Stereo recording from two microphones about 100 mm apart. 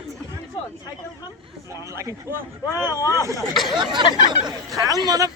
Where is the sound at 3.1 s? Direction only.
30° right (ahead or behind).